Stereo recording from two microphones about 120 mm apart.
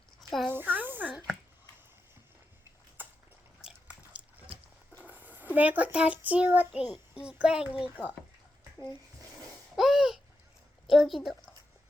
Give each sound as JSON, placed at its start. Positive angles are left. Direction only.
{"t": 0.2, "sound": "a sound", "side_deg": 0}
{"t": 0.5, "sound": "snake", "side_deg": -15}
{"t": 3.6, "sound": "biting", "side_deg": -5}
{"t": 5.0, "sound": "a child's voice", "side_deg": -15}
{"t": 9.7, "sound": "a sound", "side_deg": -5}
{"t": 10.8, "sound": "a woman's voice", "side_deg": 0}